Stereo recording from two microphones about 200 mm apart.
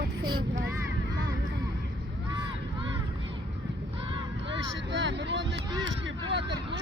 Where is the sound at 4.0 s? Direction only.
25° right (ahead or behind).